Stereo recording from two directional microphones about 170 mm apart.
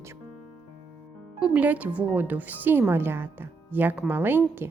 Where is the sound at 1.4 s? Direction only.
10° right (ahead or behind).